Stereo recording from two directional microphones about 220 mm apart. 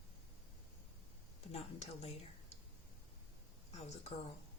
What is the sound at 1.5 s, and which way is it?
Speech, 25° left (ahead or behind).